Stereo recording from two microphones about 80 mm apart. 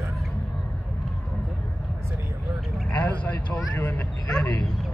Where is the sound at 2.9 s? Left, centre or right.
Centre.